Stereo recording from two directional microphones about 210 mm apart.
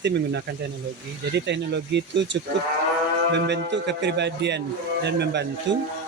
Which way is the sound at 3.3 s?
55° right (ahead or behind).